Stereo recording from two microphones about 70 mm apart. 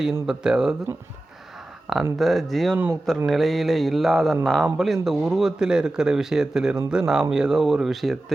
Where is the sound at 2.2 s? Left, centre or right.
Centre.